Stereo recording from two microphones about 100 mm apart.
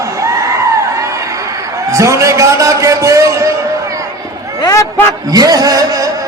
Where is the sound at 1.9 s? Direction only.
30° right (ahead or behind).